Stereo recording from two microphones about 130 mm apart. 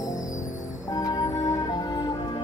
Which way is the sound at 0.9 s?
25° left (ahead or behind).